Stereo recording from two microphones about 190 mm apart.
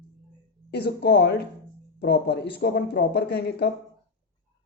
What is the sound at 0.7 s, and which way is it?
Speech, 60° left (ahead or behind).